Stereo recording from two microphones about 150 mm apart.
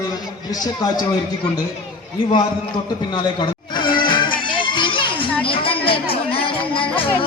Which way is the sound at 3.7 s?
30° left (ahead or behind).